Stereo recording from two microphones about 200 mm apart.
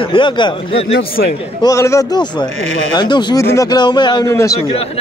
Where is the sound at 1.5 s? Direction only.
15° left (ahead or behind).